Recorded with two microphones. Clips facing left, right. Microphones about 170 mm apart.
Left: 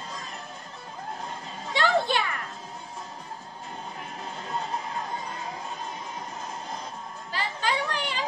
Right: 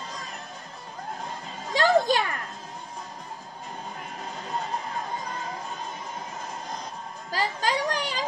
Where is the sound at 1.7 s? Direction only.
40° right (ahead or behind).